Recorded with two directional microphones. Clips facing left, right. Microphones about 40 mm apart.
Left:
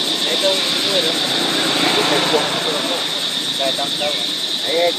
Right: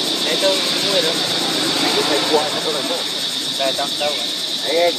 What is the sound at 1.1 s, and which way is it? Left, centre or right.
Vehicle, left.